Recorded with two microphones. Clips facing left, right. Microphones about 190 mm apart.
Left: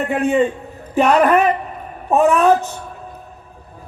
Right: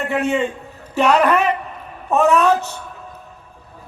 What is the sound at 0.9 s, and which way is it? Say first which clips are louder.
Speech: left 2 dB; 55° left (ahead or behind).